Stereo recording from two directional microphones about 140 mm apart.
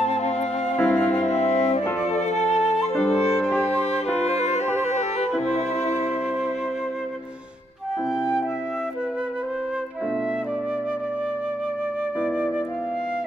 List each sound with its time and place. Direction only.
0.0 s music: 50° left (ahead or behind)
0.7 s music: 15° left (ahead or behind)
1.2 s music: 55° left (ahead or behind)
4.2 s music: 50° left (ahead or behind)